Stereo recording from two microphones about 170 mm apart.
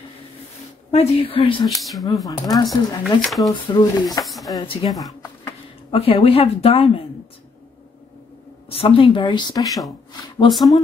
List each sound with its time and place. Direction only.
0.9 s speech: 30° left (ahead or behind)
1.8 s speech: centre (ahead or behind)
2.5 s speech: 20° left (ahead or behind)
3.0 s speech: centre (ahead or behind)
3.6 s speech: 25° left (ahead or behind)
4.2 s speech: centre (ahead or behind)
4.6 s speech: 25° left (ahead or behind)
8.6 s speech: 35° left (ahead or behind)
10.5 s speech: centre (ahead or behind)